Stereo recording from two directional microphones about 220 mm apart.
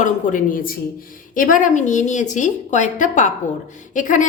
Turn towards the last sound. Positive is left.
turn(degrees=35)  # may be behind; listen again after turning